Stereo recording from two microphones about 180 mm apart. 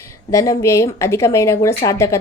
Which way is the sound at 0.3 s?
15° left (ahead or behind).